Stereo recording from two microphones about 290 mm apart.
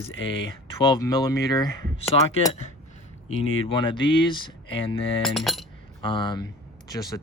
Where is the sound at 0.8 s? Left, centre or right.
Centre.